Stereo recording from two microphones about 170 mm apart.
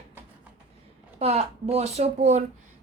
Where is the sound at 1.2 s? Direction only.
40° right (ahead or behind).